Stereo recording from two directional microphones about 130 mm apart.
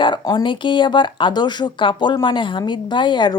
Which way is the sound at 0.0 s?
35° left (ahead or behind).